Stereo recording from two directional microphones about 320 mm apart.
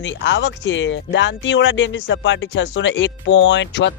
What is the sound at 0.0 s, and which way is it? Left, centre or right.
Speech, left.